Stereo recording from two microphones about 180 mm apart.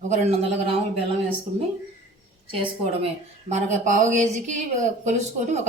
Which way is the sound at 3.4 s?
40° right (ahead or behind).